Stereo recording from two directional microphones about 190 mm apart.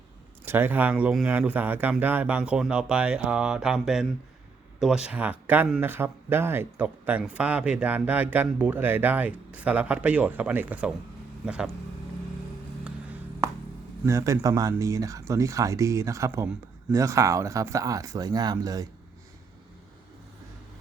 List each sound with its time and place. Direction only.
0.4 s speech: 10° right (ahead or behind)
14.0 s speech: 15° right (ahead or behind)